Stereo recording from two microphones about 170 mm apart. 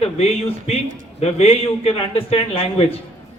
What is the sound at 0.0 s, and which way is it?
Speech, 35° left (ahead or behind).